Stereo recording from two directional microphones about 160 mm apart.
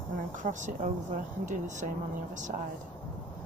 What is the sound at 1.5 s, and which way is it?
Speech, 50° right (ahead or behind).